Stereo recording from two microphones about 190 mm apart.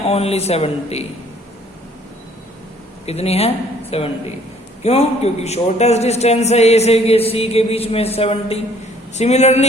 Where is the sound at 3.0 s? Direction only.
35° left (ahead or behind).